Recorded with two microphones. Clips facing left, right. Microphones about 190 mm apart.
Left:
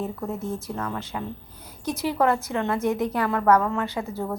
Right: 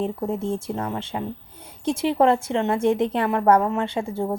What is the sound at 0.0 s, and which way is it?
A woman's voice, 25° right (ahead or behind).